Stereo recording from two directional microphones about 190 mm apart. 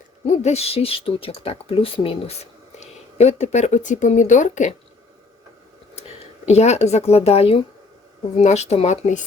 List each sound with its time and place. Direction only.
0.3 s speech: 35° left (ahead or behind)
6.0 s speech: 35° left (ahead or behind)